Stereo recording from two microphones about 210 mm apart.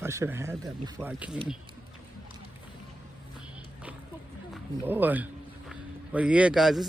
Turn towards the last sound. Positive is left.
turn(degrees=0)  # may be behind; listen again after turning